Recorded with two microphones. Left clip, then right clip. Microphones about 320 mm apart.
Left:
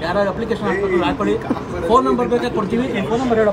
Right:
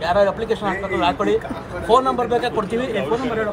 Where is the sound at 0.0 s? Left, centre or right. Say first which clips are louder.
Right 2 dB; right.